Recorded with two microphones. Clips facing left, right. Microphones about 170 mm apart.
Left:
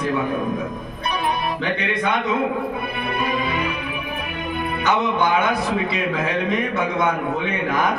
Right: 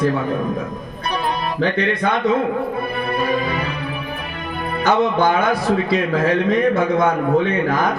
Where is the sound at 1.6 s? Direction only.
35° right (ahead or behind).